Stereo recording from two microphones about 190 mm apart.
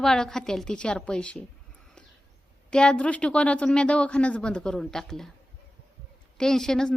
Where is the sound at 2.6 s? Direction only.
5° left (ahead or behind).